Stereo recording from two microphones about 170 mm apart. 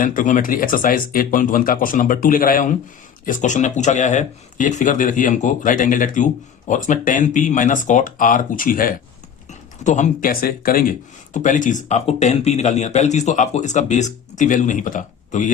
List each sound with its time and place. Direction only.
0.0 s speech: 50° left (ahead or behind)